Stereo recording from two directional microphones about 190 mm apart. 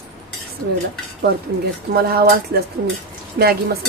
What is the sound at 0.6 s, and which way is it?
Speech, 55° right (ahead or behind).